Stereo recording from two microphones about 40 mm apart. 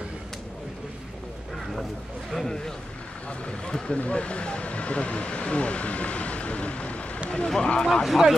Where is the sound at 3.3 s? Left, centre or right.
Left.